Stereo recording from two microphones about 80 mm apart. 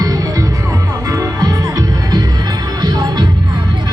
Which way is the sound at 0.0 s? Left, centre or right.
Right.